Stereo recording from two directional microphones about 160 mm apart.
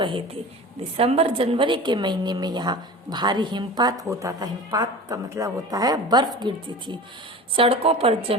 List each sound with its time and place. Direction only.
0.9 s a woman's voice: 35° right (ahead or behind)